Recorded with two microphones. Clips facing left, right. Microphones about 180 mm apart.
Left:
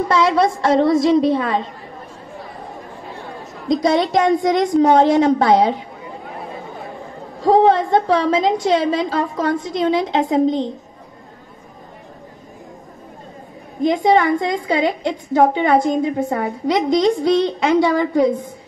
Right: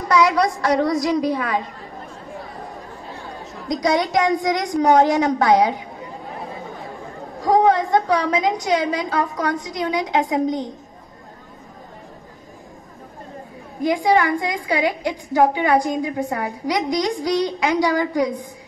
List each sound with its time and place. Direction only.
0.1 s a woman's voice: 25° left (ahead or behind)
3.6 s a woman's voice: 25° left (ahead or behind)
7.4 s a woman's voice: 25° left (ahead or behind)
13.7 s a woman's voice: 20° left (ahead or behind)